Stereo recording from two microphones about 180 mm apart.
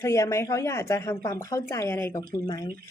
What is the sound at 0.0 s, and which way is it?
A woman's voice, 15° left (ahead or behind).